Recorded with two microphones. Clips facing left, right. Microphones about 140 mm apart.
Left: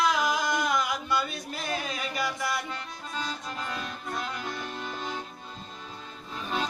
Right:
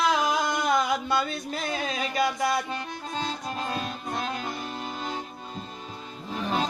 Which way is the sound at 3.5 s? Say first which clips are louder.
Right 4 dB; 30° right (ahead or behind).